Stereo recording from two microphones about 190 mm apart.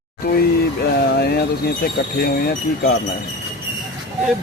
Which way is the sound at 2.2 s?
55° left (ahead or behind).